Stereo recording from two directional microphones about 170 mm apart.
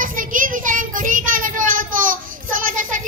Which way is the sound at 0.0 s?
50° right (ahead or behind).